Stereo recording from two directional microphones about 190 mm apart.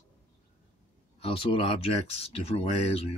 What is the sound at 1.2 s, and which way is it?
Speech, 30° left (ahead or behind).